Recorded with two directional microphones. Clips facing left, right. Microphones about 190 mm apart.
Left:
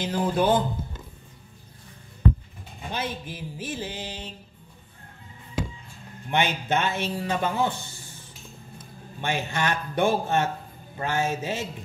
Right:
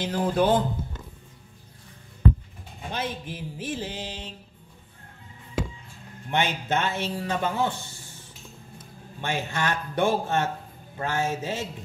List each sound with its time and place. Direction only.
0.0 s music: 5° left (ahead or behind)
2.9 s music: 5° left (ahead or behind)
6.3 s speech: 15° left (ahead or behind)
9.2 s speech: 20° left (ahead or behind)